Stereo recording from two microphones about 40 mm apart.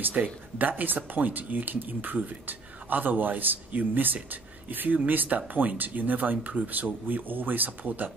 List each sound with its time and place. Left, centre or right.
0.1 s speech: right
6.3 s speech: right
6.7 s speech: right